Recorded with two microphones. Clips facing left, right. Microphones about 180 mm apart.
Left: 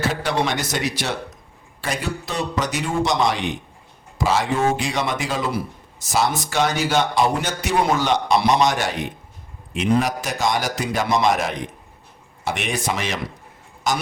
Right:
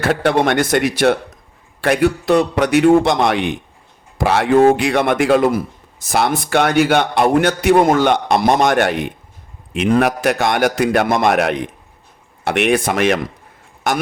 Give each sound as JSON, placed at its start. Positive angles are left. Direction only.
{"t": 0.0, "sound": "a man's voice", "side_deg": -60}